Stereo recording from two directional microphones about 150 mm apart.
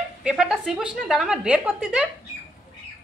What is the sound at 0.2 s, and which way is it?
A woman's voice, 5° right (ahead or behind).